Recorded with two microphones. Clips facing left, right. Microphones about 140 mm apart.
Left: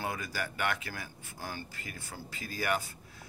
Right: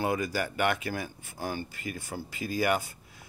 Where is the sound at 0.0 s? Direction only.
15° right (ahead or behind).